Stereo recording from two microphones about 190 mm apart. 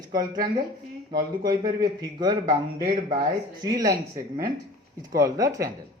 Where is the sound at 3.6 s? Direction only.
20° right (ahead or behind).